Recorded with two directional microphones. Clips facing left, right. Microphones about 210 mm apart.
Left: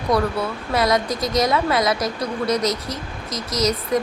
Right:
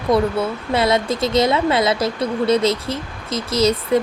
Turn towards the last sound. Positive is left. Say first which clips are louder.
# right 4 dB
turn(degrees=-30)  # may be behind; listen again after turning